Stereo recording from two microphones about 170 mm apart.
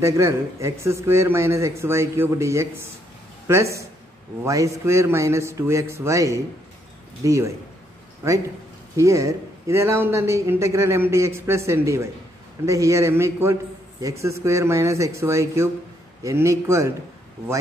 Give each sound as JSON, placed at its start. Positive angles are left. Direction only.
{"t": 0.0, "sound": "a man's voice", "side_deg": -15}
{"t": 8.9, "sound": "a man's voice", "side_deg": -20}